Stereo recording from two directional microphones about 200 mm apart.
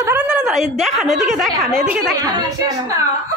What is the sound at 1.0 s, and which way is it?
A woman's voice, centre (ahead or behind).